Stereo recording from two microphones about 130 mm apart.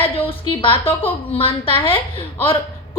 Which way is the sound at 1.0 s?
45° left (ahead or behind).